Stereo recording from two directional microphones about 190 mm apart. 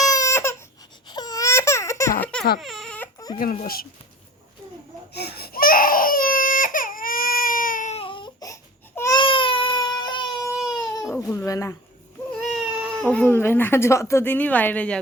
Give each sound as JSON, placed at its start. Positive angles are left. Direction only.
{"t": 0.0, "sound": "baby cry", "side_deg": 15}
{"t": 1.1, "sound": "a sound", "side_deg": 20}
{"t": 2.6, "sound": "baby cry", "side_deg": 0}
{"t": 3.3, "sound": "a child's voice", "side_deg": 45}
{"t": 5.1, "sound": "baby cry", "side_deg": 55}
{"t": 10.5, "sound": "baby cry", "side_deg": 0}
{"t": 11.1, "sound": "speech", "side_deg": 15}
{"t": 12.3, "sound": "speech", "side_deg": 0}